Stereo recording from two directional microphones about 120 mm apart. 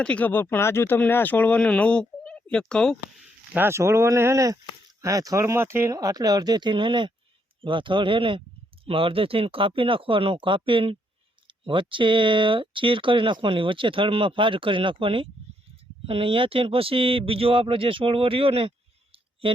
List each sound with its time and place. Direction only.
0.0 s speech: 10° left (ahead or behind)
3.5 s speech: 20° right (ahead or behind); by 19.6 s 45° right (ahead or behind)